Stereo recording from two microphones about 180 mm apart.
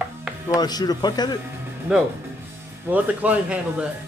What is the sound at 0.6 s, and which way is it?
Speech, 20° left (ahead or behind).